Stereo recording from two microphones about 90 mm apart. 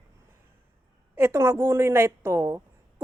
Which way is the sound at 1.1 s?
30° right (ahead or behind).